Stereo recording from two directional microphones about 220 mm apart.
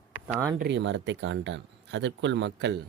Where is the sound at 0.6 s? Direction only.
55° right (ahead or behind).